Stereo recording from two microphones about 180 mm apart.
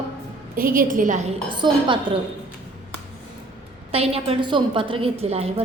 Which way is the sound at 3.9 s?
30° right (ahead or behind).